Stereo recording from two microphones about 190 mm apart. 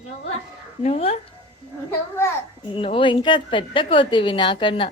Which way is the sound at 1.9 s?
15° left (ahead or behind).